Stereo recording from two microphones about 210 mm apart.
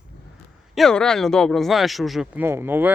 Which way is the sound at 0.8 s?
5° left (ahead or behind).